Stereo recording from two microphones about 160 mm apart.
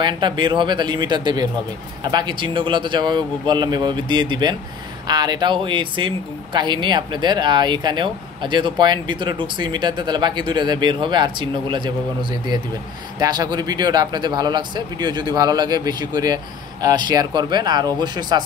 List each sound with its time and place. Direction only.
0.0 s speech: 30° right (ahead or behind)